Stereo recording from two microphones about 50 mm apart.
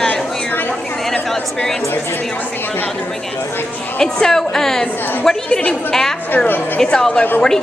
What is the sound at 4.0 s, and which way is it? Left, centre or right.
Speech, centre.